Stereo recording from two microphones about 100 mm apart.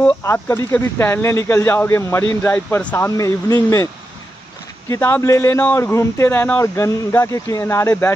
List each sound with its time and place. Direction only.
0.0 s speech: 25° left (ahead or behind)
3.0 s speech: 30° left (ahead or behind)